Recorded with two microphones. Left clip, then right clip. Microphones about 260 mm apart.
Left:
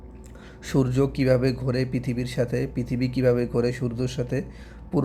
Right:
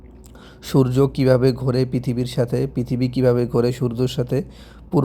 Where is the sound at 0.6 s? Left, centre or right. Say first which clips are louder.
Right 6 dB; centre.